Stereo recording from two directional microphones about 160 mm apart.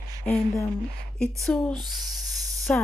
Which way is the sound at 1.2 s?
5° left (ahead or behind).